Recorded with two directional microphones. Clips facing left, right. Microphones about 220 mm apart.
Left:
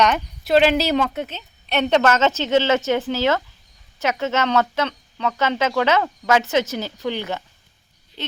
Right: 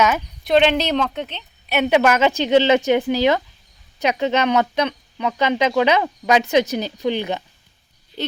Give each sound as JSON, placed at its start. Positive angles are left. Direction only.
{"t": 0.0, "sound": "speech", "side_deg": 0}
{"t": 1.7, "sound": "speech", "side_deg": -10}